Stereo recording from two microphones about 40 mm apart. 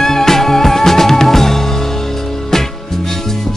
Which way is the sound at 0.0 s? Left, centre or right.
Centre.